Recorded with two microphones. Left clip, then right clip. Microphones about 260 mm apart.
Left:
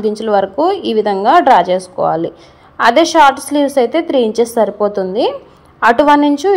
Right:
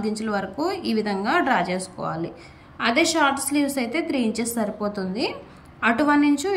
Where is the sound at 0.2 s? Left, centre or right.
Left.